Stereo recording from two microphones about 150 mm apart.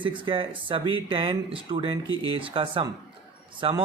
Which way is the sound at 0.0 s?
35° right (ahead or behind).